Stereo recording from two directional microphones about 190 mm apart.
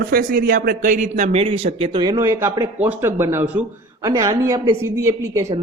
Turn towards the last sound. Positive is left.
turn(degrees=-15)  # may be behind; listen again after turning